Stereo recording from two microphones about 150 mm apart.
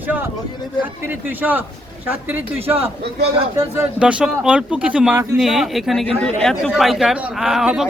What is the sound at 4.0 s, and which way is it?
A man's voice, 5° right (ahead or behind).